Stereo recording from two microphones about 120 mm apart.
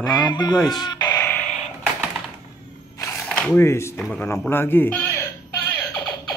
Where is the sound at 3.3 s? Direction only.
10° left (ahead or behind).